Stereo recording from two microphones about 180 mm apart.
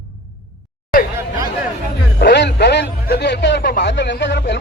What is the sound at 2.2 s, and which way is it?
Music, 70° left (ahead or behind).